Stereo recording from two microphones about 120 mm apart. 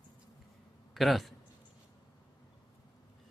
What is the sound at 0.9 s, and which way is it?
Speech, centre (ahead or behind).